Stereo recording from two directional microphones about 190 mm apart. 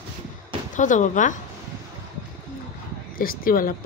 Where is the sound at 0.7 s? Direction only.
40° left (ahead or behind).